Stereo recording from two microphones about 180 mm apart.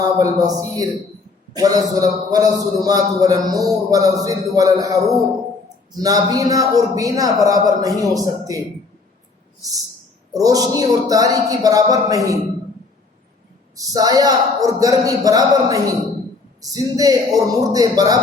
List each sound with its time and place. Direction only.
0.2 s a man's voice: 20° right (ahead or behind)
10.3 s a man's voice: 20° right (ahead or behind)
13.7 s a man's voice: 20° right (ahead or behind)